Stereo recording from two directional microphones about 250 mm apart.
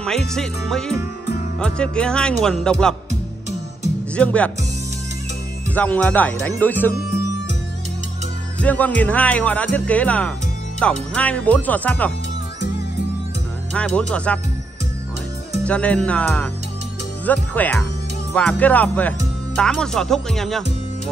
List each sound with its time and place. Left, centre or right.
0.0 s speech: centre
3.1 s music: right
4.1 s speech: centre
5.8 s speech: centre
8.5 s speech: centre
13.7 s speech: centre
15.6 s speech: centre